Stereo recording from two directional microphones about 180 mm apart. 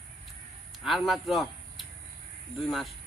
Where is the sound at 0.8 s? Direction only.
Centre (ahead or behind).